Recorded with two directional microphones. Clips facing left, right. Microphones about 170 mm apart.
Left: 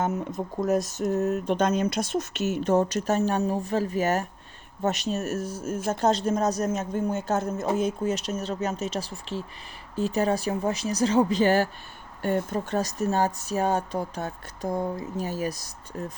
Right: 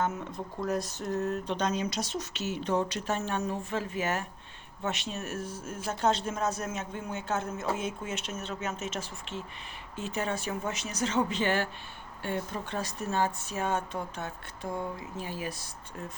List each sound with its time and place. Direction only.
0.3 s speech: 45° left (ahead or behind)